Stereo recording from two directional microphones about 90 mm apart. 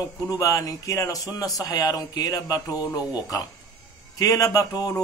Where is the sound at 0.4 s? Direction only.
40° left (ahead or behind).